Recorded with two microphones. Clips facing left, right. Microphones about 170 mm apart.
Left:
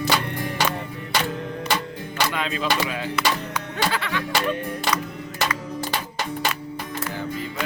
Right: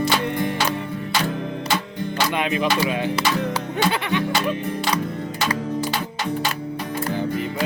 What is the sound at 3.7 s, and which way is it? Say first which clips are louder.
Music: right 3 dB; 20° right (ahead or behind).